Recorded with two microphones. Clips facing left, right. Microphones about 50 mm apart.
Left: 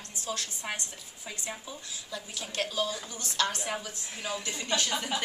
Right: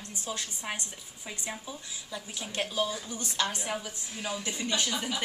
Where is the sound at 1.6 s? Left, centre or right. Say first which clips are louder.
Right 1 dB; centre.